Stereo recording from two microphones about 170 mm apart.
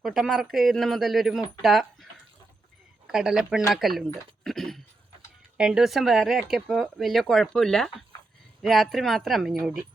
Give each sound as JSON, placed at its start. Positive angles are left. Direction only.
{"t": 0.0, "sound": "speech", "side_deg": 0}
{"t": 3.1, "sound": "speech", "side_deg": -5}
{"t": 4.4, "sound": "dog", "side_deg": 0}
{"t": 5.5, "sound": "speech", "side_deg": -5}